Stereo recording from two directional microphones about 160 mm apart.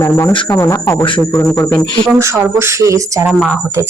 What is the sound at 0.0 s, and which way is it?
Speech, 15° left (ahead or behind).